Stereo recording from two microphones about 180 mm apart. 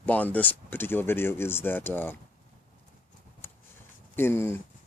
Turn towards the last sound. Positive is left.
turn(degrees=10)  # may be behind; listen again after turning